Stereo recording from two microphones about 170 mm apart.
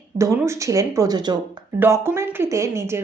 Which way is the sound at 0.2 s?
15° right (ahead or behind).